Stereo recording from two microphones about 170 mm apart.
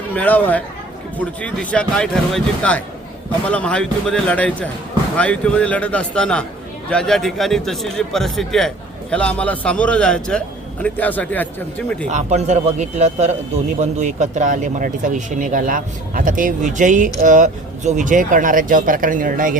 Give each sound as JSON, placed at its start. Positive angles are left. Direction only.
{"t": 0.1, "sound": "a man's voice", "side_deg": 10}
{"t": 12.0, "sound": "speech", "side_deg": -45}